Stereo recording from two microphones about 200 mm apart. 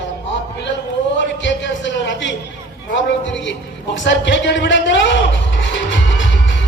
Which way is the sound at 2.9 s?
65° left (ahead or behind).